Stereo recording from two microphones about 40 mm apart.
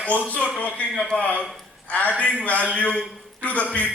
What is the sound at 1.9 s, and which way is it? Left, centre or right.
A man's voice, left.